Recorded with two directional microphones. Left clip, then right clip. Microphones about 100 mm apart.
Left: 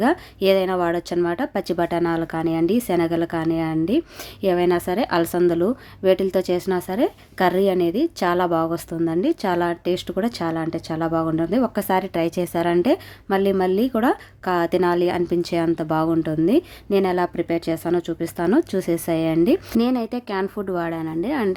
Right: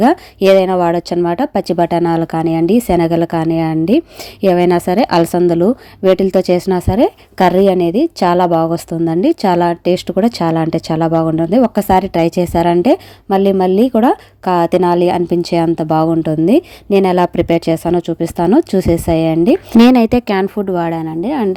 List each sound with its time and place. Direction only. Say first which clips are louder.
0.0 s speech: right 8 dB; 55° right (ahead or behind)
5.5 s speech: right 8 dB; 45° right (ahead or behind); by 11.1 s 80° right
11.3 s a woman's voice: right 9 dB; 50° right (ahead or behind); by 17.9 s 80° right
18.4 s speech: right 8 dB; 45° right (ahead or behind)
20.2 s a woman's voice: right 9 dB; 90° right
20.7 s a woman's voice: right 7 dB; 45° right (ahead or behind)